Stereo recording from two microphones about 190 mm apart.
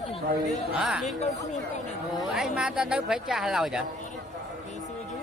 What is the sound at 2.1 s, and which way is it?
Speech, centre (ahead or behind).